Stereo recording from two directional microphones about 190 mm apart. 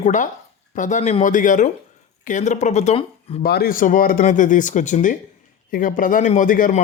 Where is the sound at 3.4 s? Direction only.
55° left (ahead or behind).